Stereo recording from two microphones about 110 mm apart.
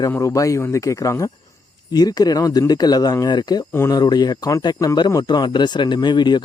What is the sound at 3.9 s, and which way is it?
Speech, 40° left (ahead or behind).